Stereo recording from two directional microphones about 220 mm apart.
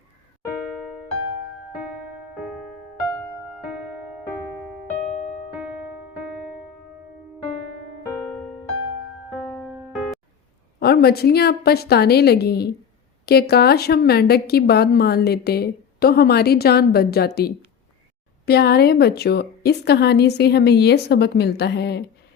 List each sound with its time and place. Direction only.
1.8 s music: 5° right (ahead or behind)
9.5 s music: centre (ahead or behind)
10.8 s a woman's voice: 45° left (ahead or behind)